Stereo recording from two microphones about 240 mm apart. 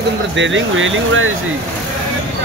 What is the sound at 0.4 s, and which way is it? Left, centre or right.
Speech, right.